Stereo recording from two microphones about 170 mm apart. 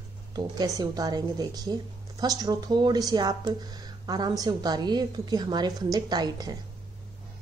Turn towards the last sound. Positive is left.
turn(degrees=-25)  # may be behind; listen again after turning